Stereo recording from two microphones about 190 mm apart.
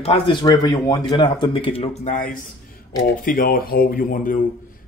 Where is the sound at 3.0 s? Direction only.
45° left (ahead or behind).